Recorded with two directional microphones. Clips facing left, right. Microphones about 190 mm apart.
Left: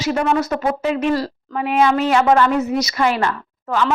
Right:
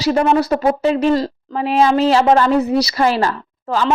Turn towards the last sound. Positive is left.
turn(degrees=-35)  # may be behind; listen again after turning